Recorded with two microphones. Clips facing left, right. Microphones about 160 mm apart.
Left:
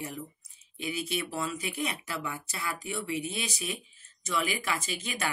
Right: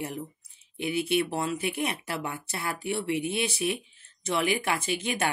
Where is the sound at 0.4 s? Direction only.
60° right (ahead or behind).